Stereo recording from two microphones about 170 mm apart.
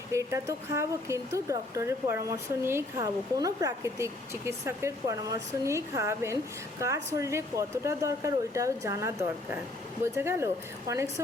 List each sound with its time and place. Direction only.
0.1 s speech: 15° right (ahead or behind)